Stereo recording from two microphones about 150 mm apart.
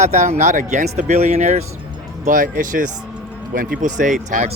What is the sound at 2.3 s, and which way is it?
Speech, 65° right (ahead or behind).